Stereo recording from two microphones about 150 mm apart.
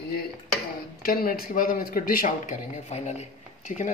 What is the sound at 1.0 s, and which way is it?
Speech, 75° left (ahead or behind).